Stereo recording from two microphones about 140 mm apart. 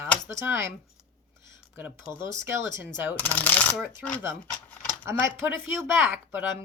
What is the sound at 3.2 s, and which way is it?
Speech, 10° left (ahead or behind).